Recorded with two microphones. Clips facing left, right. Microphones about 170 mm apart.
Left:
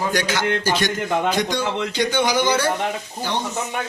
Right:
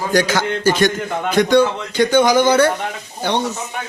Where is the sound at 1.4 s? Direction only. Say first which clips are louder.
Right 8 dB; 60° right (ahead or behind).